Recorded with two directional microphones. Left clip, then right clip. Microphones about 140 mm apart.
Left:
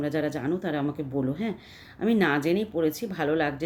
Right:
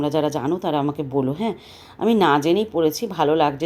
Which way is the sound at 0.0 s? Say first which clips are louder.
Right 7 dB; 15° right (ahead or behind).